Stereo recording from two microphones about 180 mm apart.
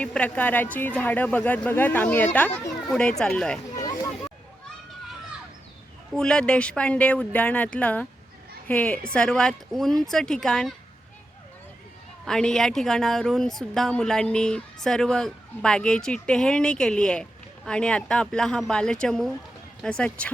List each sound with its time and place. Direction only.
0.0 s a woman's voice: 5° left (ahead or behind)
3.8 s a sound: 20° left (ahead or behind)
6.1 s a woman's voice: 5° left (ahead or behind)
12.2 s a woman's voice: 5° left (ahead or behind)